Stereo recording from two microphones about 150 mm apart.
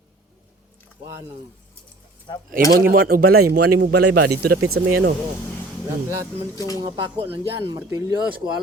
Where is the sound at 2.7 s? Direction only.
75° right (ahead or behind).